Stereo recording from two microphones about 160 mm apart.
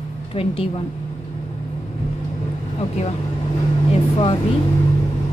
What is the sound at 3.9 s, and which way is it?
Vehicle, 35° left (ahead or behind).